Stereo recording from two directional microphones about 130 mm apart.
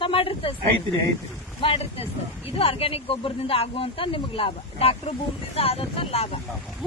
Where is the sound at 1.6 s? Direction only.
45° left (ahead or behind).